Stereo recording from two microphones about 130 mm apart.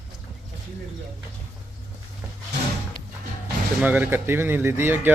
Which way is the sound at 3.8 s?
15° right (ahead or behind).